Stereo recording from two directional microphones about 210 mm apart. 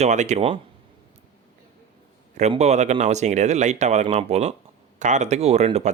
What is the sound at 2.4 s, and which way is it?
Speech, 30° right (ahead or behind).